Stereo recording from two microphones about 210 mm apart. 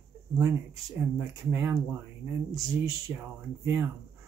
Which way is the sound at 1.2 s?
10° right (ahead or behind).